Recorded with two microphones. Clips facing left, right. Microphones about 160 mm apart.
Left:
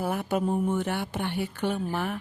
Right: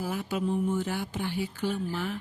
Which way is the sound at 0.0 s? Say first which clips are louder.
Left 3 dB; 60° left (ahead or behind).